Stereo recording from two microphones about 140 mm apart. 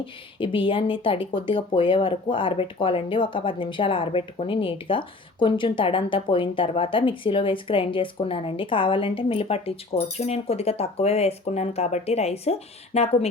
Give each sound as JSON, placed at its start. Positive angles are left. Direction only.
{"t": 0.0, "sound": "speech", "side_deg": 40}